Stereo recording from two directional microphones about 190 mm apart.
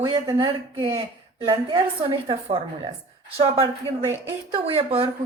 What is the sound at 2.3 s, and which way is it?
Speech, 25° right (ahead or behind).